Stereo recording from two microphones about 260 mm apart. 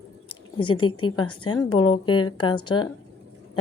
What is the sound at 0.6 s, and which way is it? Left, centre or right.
A woman's voice, centre.